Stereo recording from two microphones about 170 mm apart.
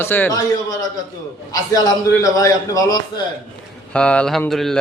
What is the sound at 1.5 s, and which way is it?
A man's voice, 20° left (ahead or behind).